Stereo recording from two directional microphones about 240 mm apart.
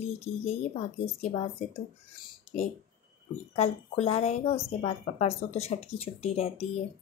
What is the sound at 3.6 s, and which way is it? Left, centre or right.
Speech, left.